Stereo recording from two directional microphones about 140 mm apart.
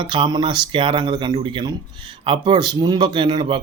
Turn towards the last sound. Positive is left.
turn(degrees=-35)  # may be behind; listen again after turning